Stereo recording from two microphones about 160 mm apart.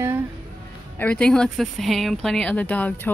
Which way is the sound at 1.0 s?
5° left (ahead or behind).